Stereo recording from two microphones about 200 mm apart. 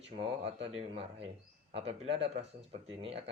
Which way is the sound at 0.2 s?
30° right (ahead or behind).